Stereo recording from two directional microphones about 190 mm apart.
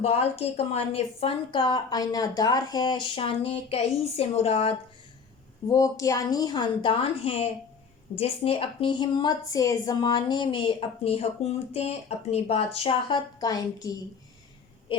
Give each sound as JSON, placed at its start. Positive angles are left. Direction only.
{"t": 0.0, "sound": "a woman's voice", "side_deg": 35}
{"t": 5.6, "sound": "a woman's voice", "side_deg": 20}